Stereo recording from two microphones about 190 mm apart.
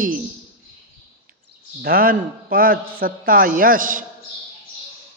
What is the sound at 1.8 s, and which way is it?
A man's voice, 50° right (ahead or behind).